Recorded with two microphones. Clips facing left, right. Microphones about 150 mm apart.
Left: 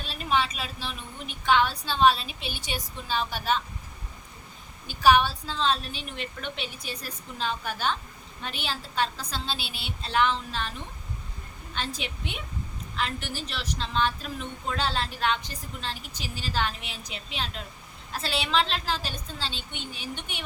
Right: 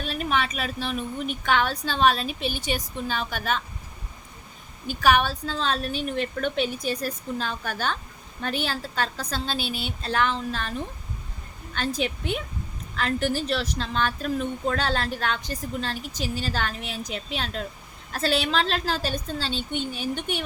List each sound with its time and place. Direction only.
0.0 s a sound: 55° right (ahead or behind)
0.8 s a woman's voice: 55° right (ahead or behind)
4.9 s a woman's voice: 50° right (ahead or behind)